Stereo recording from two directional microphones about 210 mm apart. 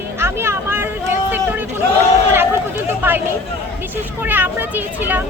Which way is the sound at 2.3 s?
10° right (ahead or behind).